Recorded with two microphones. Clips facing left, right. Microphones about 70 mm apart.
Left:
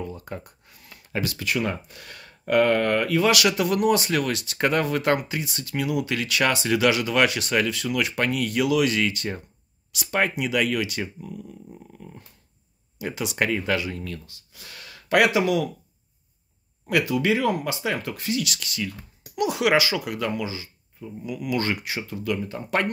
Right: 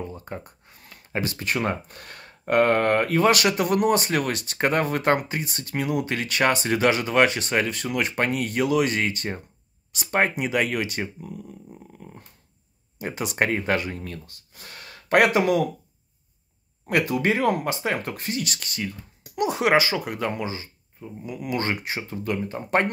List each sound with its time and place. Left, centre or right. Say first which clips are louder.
0.0 s speech: even; right
12.0 s dog: left 1 dB; right
13.0 s speech: right 1 dB; right
16.8 s speech: even; right